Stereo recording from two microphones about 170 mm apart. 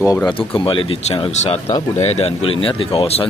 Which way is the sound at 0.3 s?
30° left (ahead or behind).